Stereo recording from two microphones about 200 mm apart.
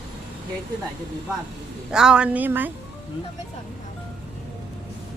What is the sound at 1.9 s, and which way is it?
Speech, 5° right (ahead or behind).